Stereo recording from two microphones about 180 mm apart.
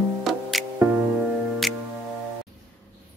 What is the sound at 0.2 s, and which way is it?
Music, centre (ahead or behind).